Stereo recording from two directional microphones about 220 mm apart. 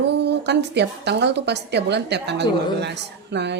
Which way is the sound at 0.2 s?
50° right (ahead or behind).